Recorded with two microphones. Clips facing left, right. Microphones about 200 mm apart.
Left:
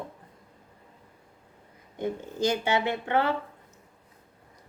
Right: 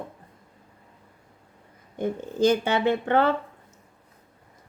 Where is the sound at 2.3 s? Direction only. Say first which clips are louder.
Right 5 dB; 55° right (ahead or behind).